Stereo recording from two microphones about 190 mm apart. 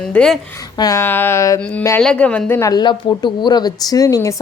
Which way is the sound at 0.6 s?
20° left (ahead or behind).